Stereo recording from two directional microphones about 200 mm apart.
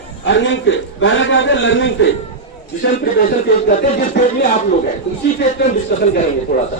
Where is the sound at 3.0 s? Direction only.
45° left (ahead or behind).